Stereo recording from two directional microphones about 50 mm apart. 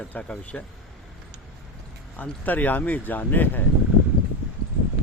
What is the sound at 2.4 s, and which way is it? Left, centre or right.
Speech, left.